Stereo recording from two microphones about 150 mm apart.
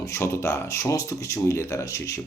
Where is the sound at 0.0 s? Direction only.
20° left (ahead or behind).